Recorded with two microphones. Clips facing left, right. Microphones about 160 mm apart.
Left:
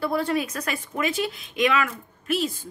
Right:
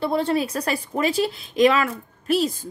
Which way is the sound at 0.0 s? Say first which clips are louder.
Right 3 dB; 25° right (ahead or behind).